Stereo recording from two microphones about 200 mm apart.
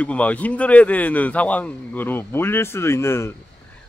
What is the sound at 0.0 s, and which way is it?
Speech, 5° left (ahead or behind).